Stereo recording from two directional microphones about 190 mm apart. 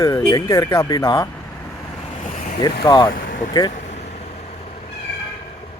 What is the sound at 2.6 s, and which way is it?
Speech, 25° left (ahead or behind).